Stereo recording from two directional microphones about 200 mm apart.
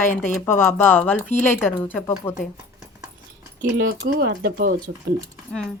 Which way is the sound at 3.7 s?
60° right (ahead or behind).